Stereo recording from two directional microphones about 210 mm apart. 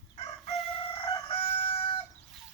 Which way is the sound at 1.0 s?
25° left (ahead or behind).